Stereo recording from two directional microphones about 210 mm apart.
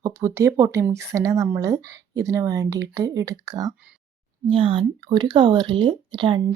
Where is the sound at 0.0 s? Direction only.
15° right (ahead or behind).